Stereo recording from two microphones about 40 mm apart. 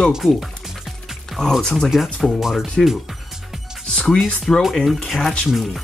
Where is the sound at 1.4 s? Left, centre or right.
Centre.